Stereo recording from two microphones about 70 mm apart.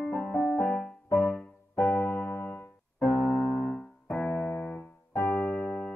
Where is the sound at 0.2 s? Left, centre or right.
Left.